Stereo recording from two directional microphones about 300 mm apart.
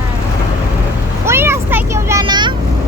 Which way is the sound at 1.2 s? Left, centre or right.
Centre.